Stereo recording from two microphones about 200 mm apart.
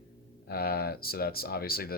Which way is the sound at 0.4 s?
50° left (ahead or behind).